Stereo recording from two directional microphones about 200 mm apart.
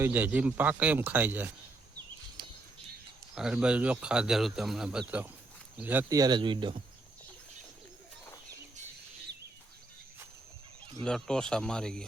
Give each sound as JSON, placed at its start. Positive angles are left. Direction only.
{"t": 0.0, "sound": "speech", "side_deg": -10}
{"t": 3.3, "sound": "speech", "side_deg": -5}
{"t": 11.0, "sound": "speech", "side_deg": 5}